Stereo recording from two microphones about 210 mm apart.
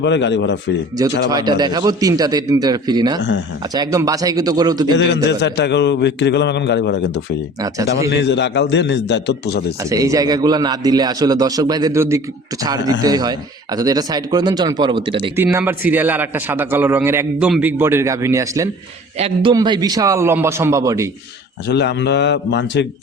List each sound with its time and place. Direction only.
0.0 s a man's voice: 55° left (ahead or behind)
1.3 s a man's voice: 20° right (ahead or behind)
5.0 s a man's voice: 55° left (ahead or behind)
9.9 s a man's voice: 15° right (ahead or behind)
15.5 s a man's voice: 10° right (ahead or behind)
21.7 s a man's voice: 55° left (ahead or behind)